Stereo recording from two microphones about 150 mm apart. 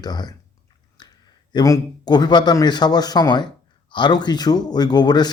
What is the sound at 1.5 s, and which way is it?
Speech, 25° left (ahead or behind).